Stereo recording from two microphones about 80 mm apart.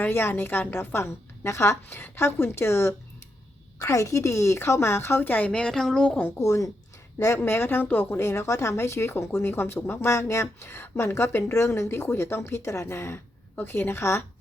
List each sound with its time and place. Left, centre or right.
0.0 s a woman's voice: left
5.5 s a woman's voice: centre
6.1 s a woman's voice: left